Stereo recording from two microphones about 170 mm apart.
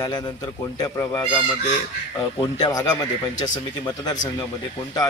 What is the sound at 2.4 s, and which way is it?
Speech, 25° left (ahead or behind).